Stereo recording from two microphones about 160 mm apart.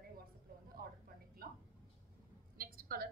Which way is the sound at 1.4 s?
65° right (ahead or behind).